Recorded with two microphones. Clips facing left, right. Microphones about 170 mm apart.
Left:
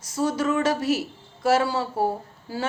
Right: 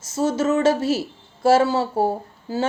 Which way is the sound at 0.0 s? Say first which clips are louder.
Right 3 dB; 25° right (ahead or behind).